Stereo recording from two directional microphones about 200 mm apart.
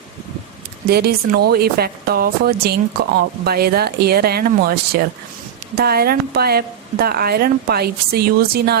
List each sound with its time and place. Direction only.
0.9 s a woman's voice: 50° right (ahead or behind)